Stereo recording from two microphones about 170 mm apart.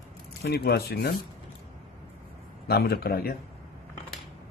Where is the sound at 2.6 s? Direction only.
70° left (ahead or behind).